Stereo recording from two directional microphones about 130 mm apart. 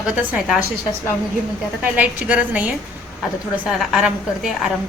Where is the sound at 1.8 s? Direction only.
10° right (ahead or behind).